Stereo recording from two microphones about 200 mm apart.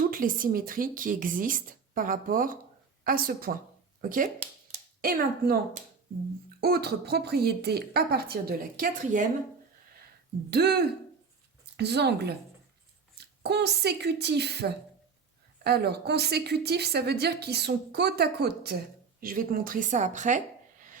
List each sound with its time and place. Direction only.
0.0 s a woman's voice: 45° right (ahead or behind)
10.5 s a woman's voice: 55° right (ahead or behind); by 20.4 s 40° right (ahead or behind)